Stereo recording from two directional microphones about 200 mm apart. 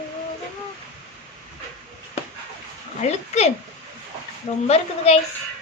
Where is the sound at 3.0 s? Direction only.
35° left (ahead or behind).